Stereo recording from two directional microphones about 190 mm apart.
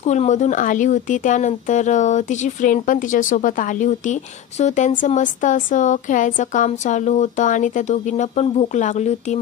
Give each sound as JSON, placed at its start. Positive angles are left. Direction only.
{"t": 0.0, "sound": "speech", "side_deg": 35}